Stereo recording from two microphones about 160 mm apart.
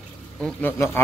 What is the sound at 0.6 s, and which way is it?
Speech, 15° left (ahead or behind).